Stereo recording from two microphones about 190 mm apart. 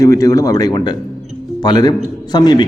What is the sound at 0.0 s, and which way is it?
A man's voice, 15° left (ahead or behind).